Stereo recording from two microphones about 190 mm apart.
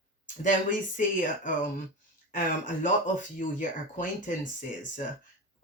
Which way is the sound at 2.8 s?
40° left (ahead or behind).